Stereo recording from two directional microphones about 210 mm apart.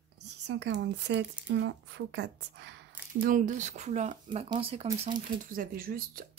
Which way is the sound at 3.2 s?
40° right (ahead or behind).